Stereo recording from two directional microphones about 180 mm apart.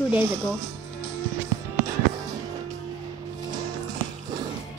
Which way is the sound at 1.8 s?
20° right (ahead or behind).